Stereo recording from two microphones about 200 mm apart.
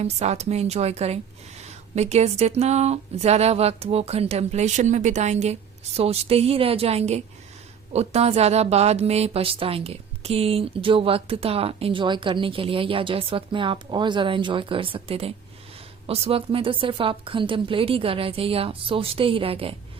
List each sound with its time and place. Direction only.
0.0 s a woman's voice: 35° right (ahead or behind)